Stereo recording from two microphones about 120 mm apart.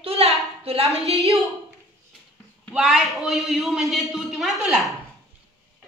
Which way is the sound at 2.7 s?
5° right (ahead or behind).